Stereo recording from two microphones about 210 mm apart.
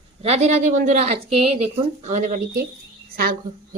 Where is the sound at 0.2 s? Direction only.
30° right (ahead or behind).